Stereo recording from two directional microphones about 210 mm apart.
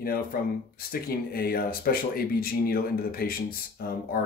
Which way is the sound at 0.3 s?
45° left (ahead or behind).